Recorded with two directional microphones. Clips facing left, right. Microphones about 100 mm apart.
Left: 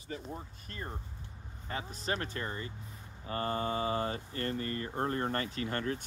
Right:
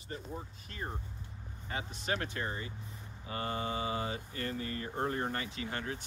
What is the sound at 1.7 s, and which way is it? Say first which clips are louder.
Speech: even; 40° left (ahead or behind).